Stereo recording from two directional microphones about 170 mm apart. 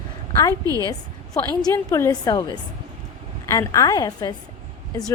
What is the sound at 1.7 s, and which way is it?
A woman's voice, 20° left (ahead or behind).